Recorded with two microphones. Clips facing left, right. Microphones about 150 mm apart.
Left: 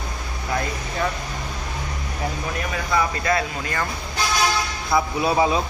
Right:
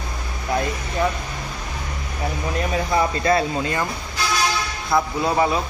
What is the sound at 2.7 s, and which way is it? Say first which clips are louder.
Speech: right 2 dB; 30° right (ahead or behind).